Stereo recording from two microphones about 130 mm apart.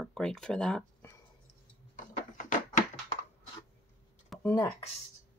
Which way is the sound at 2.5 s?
80° left.